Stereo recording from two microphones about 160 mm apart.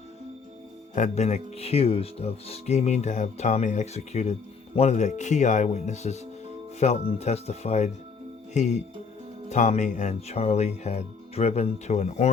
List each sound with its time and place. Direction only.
0.9 s speech: 45° left (ahead or behind)